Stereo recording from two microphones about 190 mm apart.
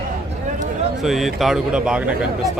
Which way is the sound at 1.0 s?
Centre (ahead or behind).